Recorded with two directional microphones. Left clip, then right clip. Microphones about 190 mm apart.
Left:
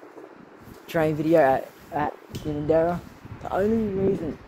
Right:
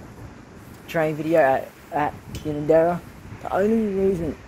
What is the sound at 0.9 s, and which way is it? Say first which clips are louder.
Speech: even; 45° left (ahead or behind).